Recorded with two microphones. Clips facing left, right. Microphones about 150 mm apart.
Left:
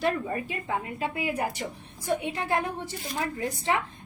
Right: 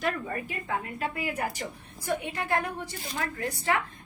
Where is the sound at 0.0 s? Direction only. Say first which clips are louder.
Left 3 dB; 25° left (ahead or behind).